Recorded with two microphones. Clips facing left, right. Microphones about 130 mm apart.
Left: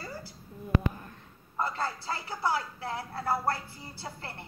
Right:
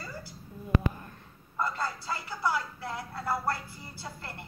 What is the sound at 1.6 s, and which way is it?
Speech, 30° left (ahead or behind).